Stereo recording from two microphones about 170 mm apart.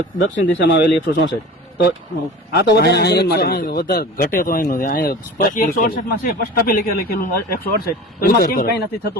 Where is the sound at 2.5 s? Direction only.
70° left (ahead or behind); by 8.7 s 55° left (ahead or behind).